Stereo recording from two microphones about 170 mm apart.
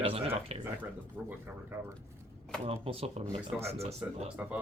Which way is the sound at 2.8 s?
35° right (ahead or behind).